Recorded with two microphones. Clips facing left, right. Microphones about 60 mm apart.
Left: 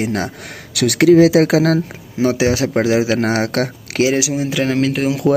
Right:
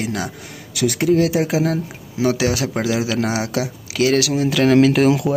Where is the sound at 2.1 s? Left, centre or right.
Left.